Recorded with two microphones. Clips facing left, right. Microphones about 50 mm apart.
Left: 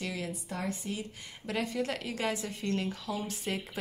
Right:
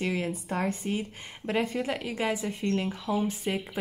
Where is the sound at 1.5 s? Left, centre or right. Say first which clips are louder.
Right 5 dB; right.